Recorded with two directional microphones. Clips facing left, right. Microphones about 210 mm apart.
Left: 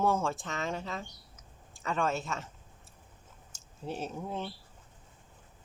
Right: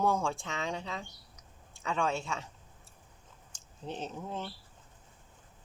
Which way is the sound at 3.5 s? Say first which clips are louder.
Left 2 dB; 10° left (ahead or behind).